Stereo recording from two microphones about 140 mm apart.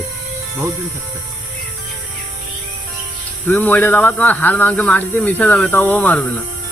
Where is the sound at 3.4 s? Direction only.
15° left (ahead or behind).